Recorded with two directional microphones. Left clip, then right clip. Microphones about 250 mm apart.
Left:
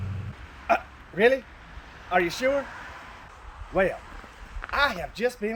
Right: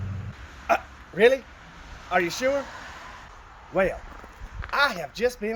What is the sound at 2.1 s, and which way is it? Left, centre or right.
Speech, centre.